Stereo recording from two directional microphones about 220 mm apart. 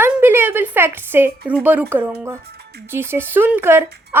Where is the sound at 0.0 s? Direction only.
10° right (ahead or behind).